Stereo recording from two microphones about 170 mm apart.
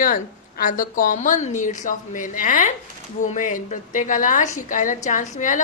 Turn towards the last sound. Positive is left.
turn(degrees=50)  # may be behind; listen again after turning